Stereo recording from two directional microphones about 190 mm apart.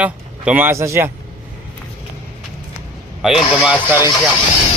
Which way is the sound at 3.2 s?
5° right (ahead or behind).